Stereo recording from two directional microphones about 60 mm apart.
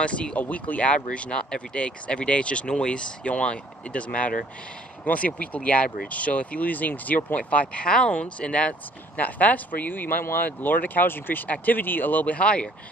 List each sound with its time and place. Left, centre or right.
0.0 s speech: centre